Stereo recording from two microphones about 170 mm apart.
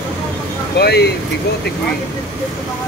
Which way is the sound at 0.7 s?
75° left (ahead or behind).